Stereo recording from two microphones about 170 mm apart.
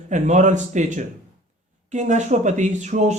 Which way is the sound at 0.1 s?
45° right (ahead or behind).